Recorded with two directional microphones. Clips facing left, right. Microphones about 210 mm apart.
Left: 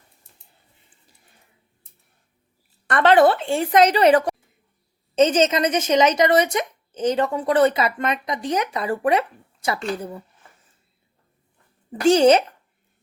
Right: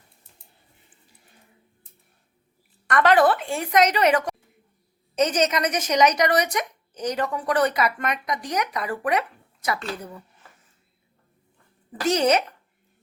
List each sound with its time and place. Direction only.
2.8 s speech: 30° left (ahead or behind)
11.9 s speech: 30° left (ahead or behind)